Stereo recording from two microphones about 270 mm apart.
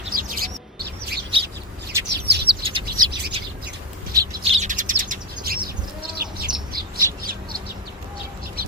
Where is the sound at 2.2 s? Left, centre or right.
Right.